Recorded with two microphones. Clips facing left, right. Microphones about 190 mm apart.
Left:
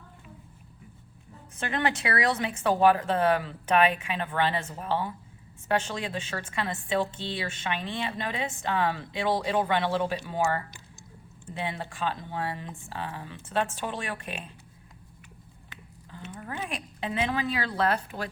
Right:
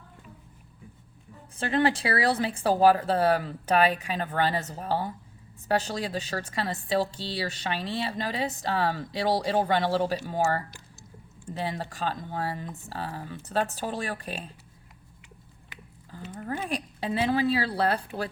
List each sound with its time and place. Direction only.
1.5 s a woman's voice: 30° right (ahead or behind)
16.4 s a woman's voice: 35° right (ahead or behind)